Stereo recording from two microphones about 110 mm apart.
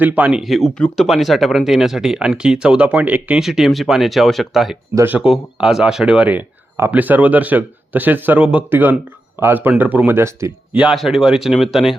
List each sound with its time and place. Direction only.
0.0 s speech: 15° right (ahead or behind)
3.4 s speech: 5° right (ahead or behind); by 10.5 s 25° right (ahead or behind)
10.9 s speech: centre (ahead or behind)